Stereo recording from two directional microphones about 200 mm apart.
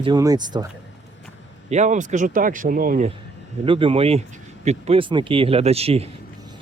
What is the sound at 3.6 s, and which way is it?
Speech, 25° right (ahead or behind).